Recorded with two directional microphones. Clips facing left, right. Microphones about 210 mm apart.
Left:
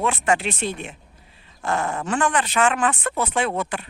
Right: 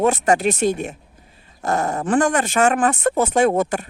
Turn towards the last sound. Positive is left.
turn(degrees=-45)  # may be behind; listen again after turning